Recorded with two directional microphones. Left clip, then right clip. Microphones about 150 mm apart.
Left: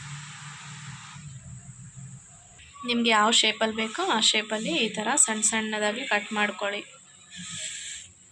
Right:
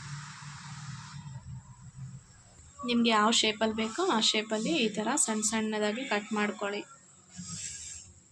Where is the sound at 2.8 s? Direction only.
Centre (ahead or behind).